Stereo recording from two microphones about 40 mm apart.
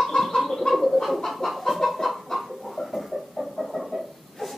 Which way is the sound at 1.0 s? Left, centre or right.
Centre.